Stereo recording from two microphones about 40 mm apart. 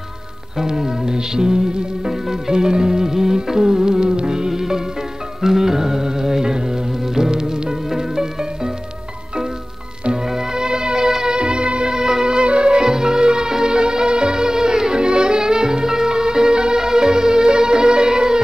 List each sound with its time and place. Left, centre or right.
0.6 s music: centre
10.2 s music: centre